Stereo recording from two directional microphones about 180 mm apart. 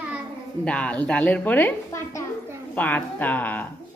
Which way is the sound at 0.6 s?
5° left (ahead or behind).